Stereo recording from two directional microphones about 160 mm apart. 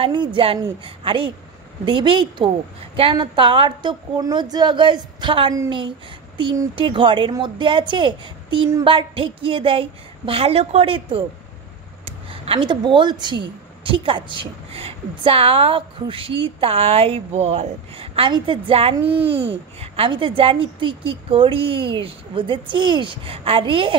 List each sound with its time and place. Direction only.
0.0 s a woman's voice: 30° right (ahead or behind)
19.3 s babbling: 90° right
19.8 s a woman's voice: 35° right (ahead or behind)